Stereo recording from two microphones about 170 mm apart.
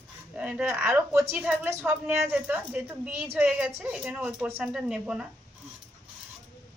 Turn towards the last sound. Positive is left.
turn(degrees=-5)  # may be behind; listen again after turning